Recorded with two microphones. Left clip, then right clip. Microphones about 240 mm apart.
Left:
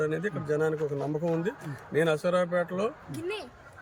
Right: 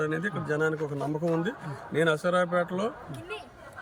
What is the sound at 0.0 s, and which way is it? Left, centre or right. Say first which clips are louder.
Speech: even; centre.